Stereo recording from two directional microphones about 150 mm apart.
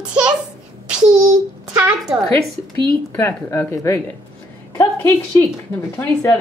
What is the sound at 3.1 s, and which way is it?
Speech, 15° left (ahead or behind).